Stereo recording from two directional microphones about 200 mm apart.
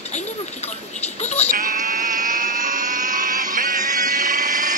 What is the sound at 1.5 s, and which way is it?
Sheep, 45° right (ahead or behind).